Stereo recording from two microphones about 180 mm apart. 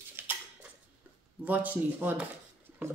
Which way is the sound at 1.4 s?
10° right (ahead or behind).